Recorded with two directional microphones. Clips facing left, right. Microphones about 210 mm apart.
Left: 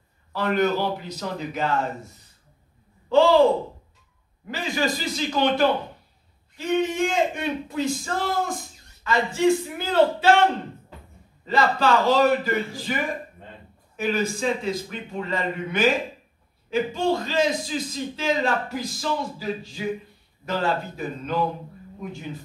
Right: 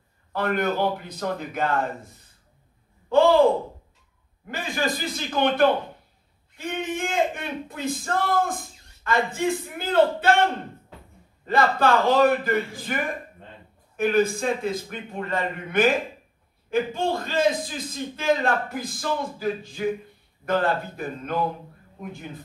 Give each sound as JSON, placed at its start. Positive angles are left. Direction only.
{"t": 0.3, "sound": "speech", "side_deg": -55}
{"t": 3.1, "sound": "speech", "side_deg": -55}
{"t": 4.5, "sound": "speech", "side_deg": -55}
{"t": 11.4, "sound": "speech", "side_deg": -55}